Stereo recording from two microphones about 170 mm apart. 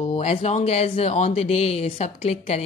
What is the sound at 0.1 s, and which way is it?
Speech, 35° left (ahead or behind).